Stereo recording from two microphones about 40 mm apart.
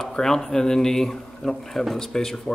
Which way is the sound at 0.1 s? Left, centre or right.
Centre.